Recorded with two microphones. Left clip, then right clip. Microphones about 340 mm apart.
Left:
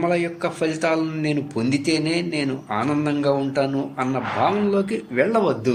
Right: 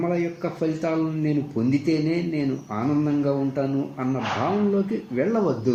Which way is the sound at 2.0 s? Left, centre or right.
Left.